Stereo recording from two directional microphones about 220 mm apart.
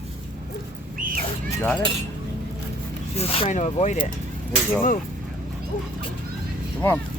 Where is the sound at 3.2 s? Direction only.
25° left (ahead or behind).